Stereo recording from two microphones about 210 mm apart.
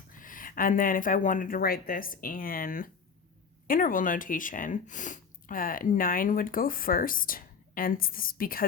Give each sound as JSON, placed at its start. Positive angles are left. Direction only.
{"t": 0.1, "sound": "speech", "side_deg": 40}